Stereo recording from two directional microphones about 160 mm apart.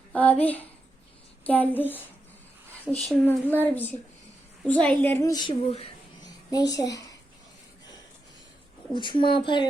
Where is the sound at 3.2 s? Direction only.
10° left (ahead or behind).